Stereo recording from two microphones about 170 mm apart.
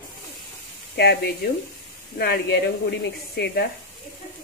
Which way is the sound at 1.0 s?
75° left (ahead or behind).